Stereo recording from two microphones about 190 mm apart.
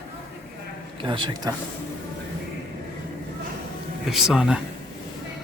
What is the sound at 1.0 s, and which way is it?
Speech, 25° right (ahead or behind).